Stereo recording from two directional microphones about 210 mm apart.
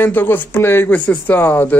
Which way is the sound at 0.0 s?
10° left (ahead or behind).